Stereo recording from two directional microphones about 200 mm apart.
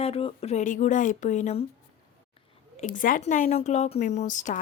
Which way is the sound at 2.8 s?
40° left (ahead or behind).